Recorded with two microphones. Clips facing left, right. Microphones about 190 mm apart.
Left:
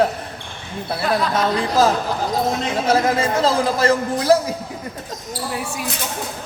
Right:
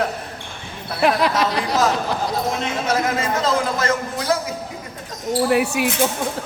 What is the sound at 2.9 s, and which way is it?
A man's voice, 30° left (ahead or behind).